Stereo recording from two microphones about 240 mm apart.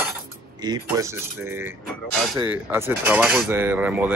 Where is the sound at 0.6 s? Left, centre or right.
Centre.